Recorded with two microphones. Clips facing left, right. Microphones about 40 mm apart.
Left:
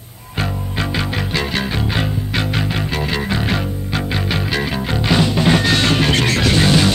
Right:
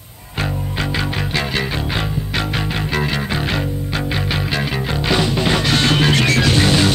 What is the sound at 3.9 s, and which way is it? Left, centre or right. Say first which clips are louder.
Music: left 1 dB; right.